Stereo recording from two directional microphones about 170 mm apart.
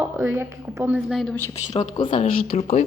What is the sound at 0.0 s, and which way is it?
Speech, 10° right (ahead or behind).